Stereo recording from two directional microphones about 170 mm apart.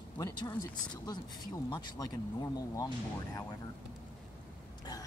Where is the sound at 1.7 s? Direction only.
25° left (ahead or behind).